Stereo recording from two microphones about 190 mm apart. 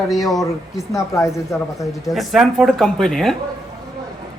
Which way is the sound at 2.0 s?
Centre (ahead or behind).